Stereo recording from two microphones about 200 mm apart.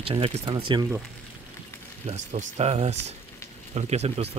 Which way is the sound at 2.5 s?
30° right (ahead or behind).